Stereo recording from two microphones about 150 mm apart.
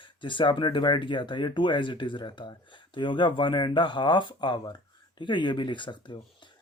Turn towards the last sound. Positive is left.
turn(degrees=30)  # may be behind; listen again after turning